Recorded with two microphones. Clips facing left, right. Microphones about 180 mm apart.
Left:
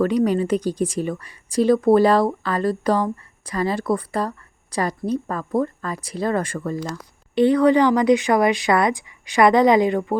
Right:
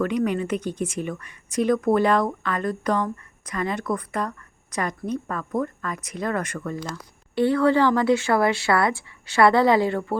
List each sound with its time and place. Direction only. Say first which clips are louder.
0.0 s speech: left 5 dB; 35° left (ahead or behind)
7.3 s speech: left 4 dB; 20° left (ahead or behind)